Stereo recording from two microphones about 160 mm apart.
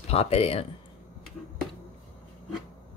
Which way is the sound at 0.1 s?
40° left (ahead or behind).